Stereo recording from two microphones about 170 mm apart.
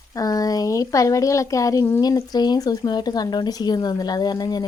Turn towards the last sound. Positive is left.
turn(degrees=25)  # may be behind; listen again after turning